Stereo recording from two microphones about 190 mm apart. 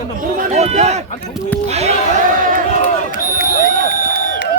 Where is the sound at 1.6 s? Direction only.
35° right (ahead or behind).